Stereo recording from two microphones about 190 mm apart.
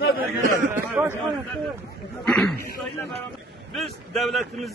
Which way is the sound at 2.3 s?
5° left (ahead or behind).